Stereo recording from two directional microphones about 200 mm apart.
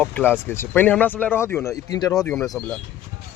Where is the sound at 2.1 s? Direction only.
5° left (ahead or behind).